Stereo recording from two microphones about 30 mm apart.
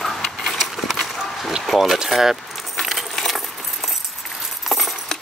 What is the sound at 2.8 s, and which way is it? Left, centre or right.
Keys jangling, centre.